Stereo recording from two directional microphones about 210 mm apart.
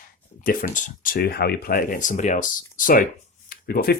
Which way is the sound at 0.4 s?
40° left (ahead or behind).